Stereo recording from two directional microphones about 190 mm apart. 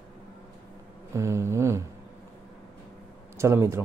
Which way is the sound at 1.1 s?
15° right (ahead or behind).